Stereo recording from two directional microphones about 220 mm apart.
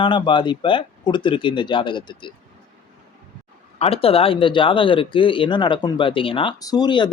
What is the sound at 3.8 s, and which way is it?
Speech, 25° left (ahead or behind).